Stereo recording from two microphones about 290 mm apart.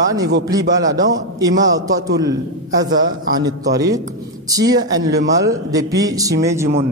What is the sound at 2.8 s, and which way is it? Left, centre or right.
Speech, right.